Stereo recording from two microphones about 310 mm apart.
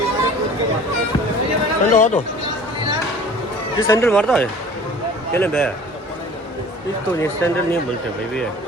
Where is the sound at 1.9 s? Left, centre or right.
Left.